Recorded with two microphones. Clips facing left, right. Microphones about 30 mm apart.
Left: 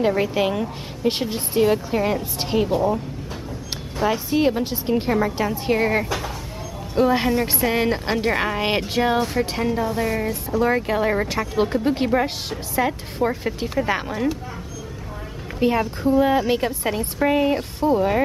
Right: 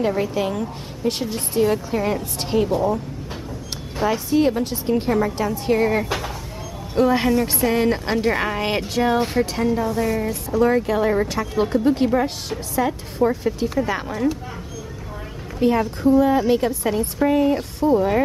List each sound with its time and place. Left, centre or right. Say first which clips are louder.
0.0 s a woman's voice: left 1 dB; centre
4.3 s a woman's voice: right 1 dB; centre
15.6 s a woman's voice: right 2 dB; centre